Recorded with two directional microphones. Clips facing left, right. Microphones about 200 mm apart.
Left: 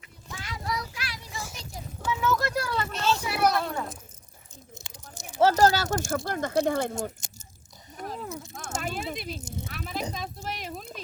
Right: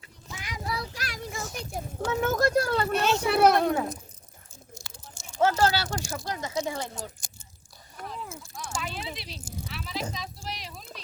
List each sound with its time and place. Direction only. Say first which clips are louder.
0.3 s child singing: even; 20° right (ahead or behind)
0.7 s child singing: left 1 dB; 30° right (ahead or behind)
1.0 s a sound: right 3 dB; 50° right (ahead or behind)
2.9 s a sound: right 4 dB; 60° right (ahead or behind)
4.7 s biting: even; 20° left (ahead or behind)
5.4 s speech: left 3 dB; 40° left (ahead or behind)